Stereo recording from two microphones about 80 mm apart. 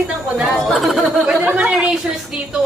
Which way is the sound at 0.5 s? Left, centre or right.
Centre.